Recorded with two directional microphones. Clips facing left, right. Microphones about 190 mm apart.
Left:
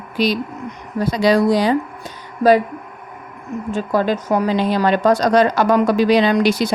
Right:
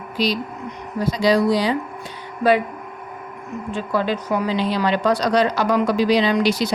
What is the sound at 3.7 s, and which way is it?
A woman's voice, 45° left (ahead or behind).